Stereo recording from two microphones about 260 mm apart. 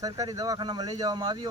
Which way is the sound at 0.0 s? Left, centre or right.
Centre.